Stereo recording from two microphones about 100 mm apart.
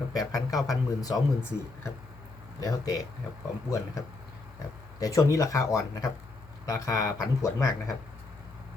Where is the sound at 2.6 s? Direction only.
35° left (ahead or behind).